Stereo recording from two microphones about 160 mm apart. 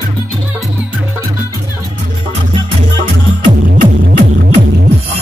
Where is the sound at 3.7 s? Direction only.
60° right (ahead or behind).